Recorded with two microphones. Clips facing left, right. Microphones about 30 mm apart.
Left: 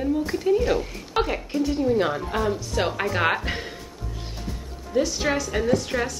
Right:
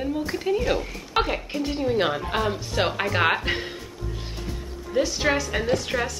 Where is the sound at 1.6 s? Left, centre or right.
Right.